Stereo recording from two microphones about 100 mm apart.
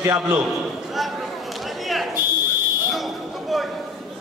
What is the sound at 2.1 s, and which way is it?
Buzzer, 45° left (ahead or behind).